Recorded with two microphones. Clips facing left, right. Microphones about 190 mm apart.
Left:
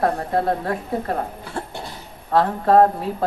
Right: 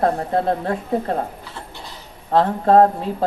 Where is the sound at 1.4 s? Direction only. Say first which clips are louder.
Left 6 dB; 55° left (ahead or behind).